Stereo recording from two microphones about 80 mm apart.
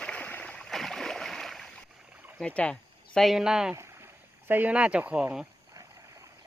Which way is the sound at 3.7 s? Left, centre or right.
Right.